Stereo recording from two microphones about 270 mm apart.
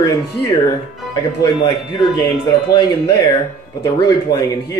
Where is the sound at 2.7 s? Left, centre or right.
Centre.